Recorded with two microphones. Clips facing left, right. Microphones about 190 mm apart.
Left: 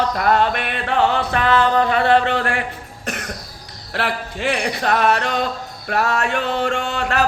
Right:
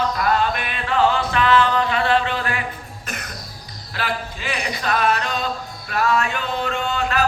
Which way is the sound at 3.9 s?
70° left (ahead or behind).